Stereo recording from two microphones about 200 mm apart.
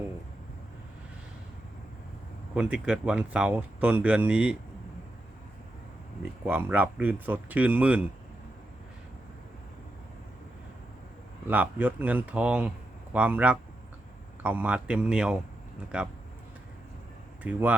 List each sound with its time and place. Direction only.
2.6 s speech: 5° right (ahead or behind)
6.4 s speech: 10° right (ahead or behind)
11.4 s speech: 10° right (ahead or behind)
17.4 s speech: 10° right (ahead or behind)